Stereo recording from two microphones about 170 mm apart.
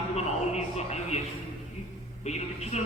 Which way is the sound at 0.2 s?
40° left (ahead or behind).